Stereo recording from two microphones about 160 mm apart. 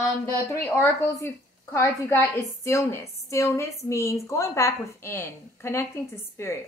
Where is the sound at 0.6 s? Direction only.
15° left (ahead or behind).